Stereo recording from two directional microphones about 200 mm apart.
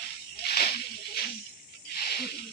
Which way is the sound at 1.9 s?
50° left (ahead or behind).